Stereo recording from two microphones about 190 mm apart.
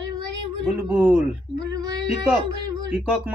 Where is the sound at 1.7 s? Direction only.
20° right (ahead or behind).